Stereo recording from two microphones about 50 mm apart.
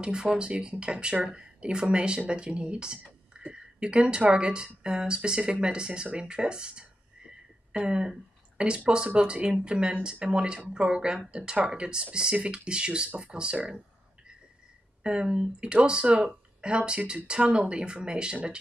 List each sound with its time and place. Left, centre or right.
0.0 s speech: centre
15.0 s speech: centre